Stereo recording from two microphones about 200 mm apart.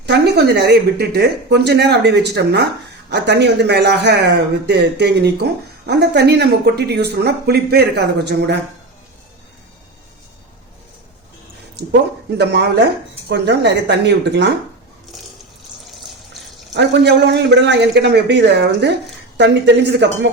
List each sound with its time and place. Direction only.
0.0 s speech: 60° right (ahead or behind)
11.9 s speech: 55° right (ahead or behind)
15.9 s water: centre (ahead or behind)
16.7 s speech: 60° right (ahead or behind)